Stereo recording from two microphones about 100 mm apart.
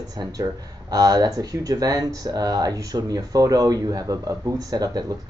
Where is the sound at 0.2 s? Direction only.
40° right (ahead or behind).